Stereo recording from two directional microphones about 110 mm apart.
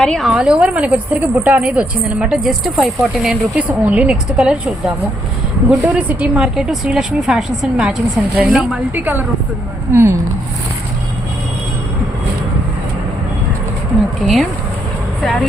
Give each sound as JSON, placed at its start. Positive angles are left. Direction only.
{"t": 0.0, "sound": "speech", "side_deg": 5}
{"t": 3.6, "sound": "speech", "side_deg": -15}
{"t": 5.6, "sound": "speech", "side_deg": -15}
{"t": 9.0, "sound": "speech", "side_deg": -15}
{"t": 14.2, "sound": "speech", "side_deg": 0}